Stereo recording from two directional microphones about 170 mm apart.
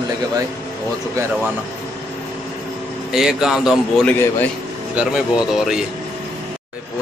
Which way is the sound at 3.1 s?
5° right (ahead or behind).